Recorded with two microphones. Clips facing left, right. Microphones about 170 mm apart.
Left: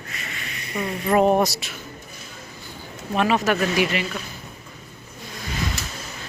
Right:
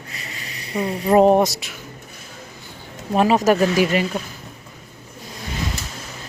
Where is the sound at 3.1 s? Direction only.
35° right (ahead or behind).